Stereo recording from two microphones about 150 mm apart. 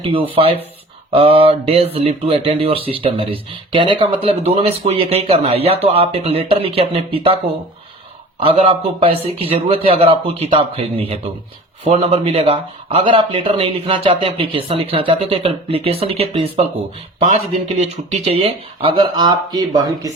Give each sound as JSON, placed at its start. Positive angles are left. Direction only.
{"t": 0.0, "sound": "speech", "side_deg": -35}
{"t": 8.4, "sound": "speech", "side_deg": -40}